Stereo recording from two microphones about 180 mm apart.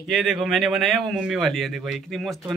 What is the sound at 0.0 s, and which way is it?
Speech, centre (ahead or behind).